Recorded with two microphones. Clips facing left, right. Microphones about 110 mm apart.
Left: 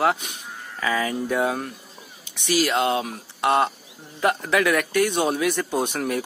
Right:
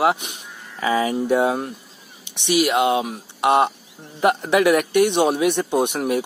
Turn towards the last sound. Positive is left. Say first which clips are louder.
# right 4 dB
turn(degrees=-20)  # may be behind; listen again after turning